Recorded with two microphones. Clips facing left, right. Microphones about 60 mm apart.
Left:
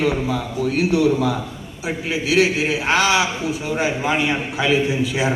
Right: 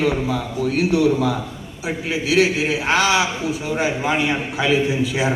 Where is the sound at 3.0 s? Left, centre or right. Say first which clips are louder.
Even; centre.